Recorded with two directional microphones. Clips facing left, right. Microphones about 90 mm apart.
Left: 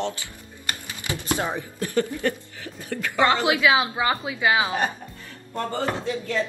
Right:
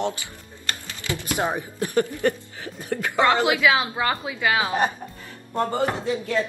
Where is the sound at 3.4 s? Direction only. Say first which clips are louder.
Even; 20° left (ahead or behind).